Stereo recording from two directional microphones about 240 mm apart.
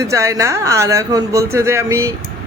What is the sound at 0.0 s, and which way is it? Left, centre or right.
A man's voice, centre.